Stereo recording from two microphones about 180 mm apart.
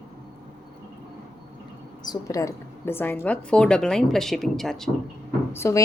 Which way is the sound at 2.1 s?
20° left (ahead or behind).